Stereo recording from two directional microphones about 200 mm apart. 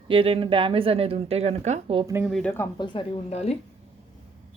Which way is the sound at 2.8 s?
25° left (ahead or behind).